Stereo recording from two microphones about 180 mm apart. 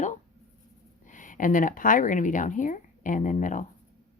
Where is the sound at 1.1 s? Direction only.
45° left (ahead or behind).